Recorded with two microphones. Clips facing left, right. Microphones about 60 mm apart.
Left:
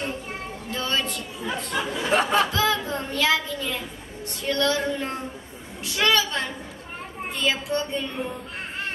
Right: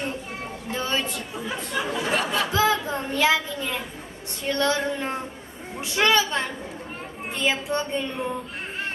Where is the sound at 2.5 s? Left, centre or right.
Right.